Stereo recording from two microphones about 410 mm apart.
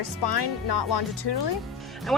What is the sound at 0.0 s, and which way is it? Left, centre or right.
Speech, left.